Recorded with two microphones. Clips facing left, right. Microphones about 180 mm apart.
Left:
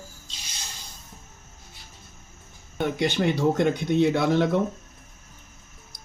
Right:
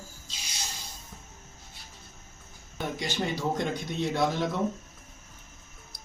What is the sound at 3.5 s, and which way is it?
Speech, 65° left (ahead or behind).